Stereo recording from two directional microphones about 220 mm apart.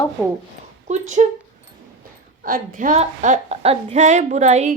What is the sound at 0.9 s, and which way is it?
Speech, 35° right (ahead or behind).